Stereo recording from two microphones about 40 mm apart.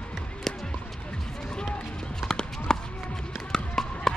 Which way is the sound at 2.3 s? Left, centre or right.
Centre.